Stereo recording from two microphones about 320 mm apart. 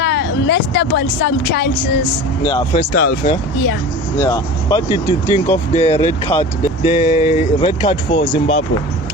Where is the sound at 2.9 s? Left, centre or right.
Left.